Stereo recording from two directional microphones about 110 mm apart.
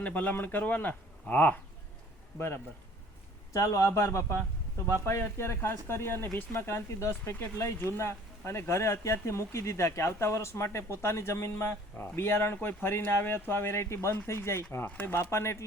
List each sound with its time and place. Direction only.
0.0 s speech: 15° left (ahead or behind)
3.5 s speech: 30° left (ahead or behind)